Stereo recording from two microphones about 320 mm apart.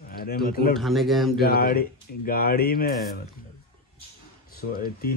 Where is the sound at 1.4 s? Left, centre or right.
Left.